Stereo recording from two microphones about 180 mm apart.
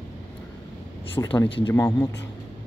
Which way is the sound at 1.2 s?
20° left (ahead or behind).